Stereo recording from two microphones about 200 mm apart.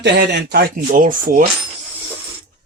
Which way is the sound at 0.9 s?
40° right (ahead or behind).